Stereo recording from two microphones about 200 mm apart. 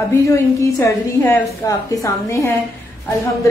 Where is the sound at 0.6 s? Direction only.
15° left (ahead or behind).